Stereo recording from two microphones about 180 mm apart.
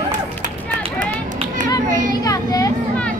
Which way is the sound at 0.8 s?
40° right (ahead or behind).